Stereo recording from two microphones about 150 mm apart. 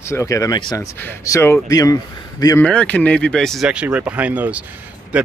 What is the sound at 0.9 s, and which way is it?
Speech, 20° left (ahead or behind).